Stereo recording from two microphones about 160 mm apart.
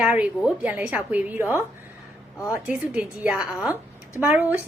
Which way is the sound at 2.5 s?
10° right (ahead or behind).